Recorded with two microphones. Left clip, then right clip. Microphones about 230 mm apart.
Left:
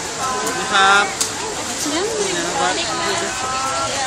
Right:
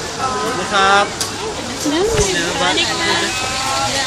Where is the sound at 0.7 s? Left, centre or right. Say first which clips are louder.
Even; centre.